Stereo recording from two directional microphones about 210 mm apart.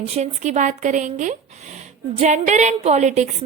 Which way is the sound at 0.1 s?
35° right (ahead or behind).